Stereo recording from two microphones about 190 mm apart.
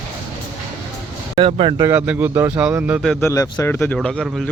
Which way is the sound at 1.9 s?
10° right (ahead or behind).